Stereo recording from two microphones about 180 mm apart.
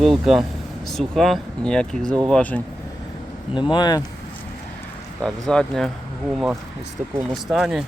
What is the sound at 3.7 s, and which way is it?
Speech, 20° left (ahead or behind).